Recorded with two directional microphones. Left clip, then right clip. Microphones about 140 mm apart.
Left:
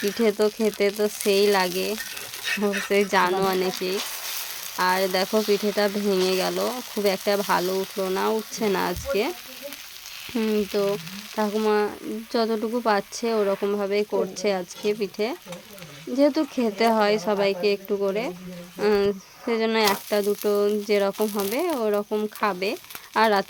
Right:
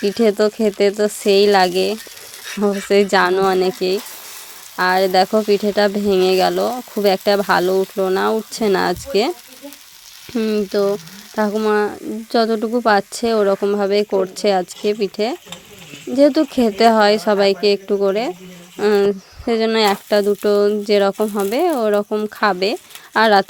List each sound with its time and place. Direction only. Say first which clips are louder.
0.2 s speech: right 6 dB; 35° right (ahead or behind)
3.3 s frying: right 8 dB; 30° right (ahead or behind)
4.8 s speech: right 8 dB; 35° right (ahead or behind)
10.3 s frying: right 6 dB; 20° right (ahead or behind)
11.8 s speech: right 6 dB; 35° right (ahead or behind)